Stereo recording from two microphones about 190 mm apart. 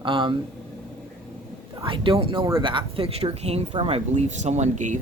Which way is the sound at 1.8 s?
25° right (ahead or behind).